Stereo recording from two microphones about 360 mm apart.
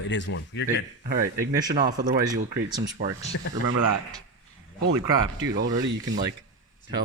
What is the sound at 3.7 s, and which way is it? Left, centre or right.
Speech, right.